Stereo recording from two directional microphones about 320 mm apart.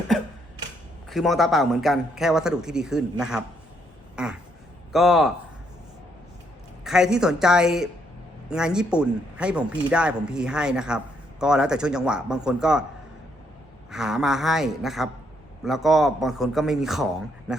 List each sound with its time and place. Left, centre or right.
1.1 s speech: centre
4.1 s a sound: centre
4.9 s speech: centre
6.8 s speech: centre
13.9 s a man's voice: centre